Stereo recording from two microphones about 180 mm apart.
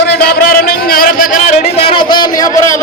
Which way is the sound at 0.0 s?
60° left (ahead or behind).